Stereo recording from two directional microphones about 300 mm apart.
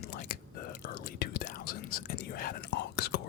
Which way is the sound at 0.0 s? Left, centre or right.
Left.